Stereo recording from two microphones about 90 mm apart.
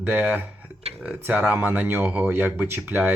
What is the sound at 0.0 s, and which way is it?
Speech, 15° right (ahead or behind).